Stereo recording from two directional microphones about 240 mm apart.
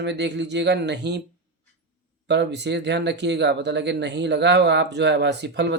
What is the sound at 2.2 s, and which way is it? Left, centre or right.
Speech, right.